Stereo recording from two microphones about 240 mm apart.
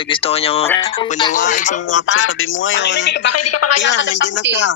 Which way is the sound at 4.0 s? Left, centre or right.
Left.